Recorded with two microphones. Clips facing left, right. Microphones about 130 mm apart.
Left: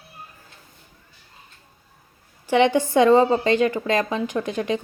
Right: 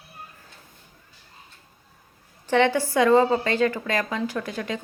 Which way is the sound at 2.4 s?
15° left (ahead or behind).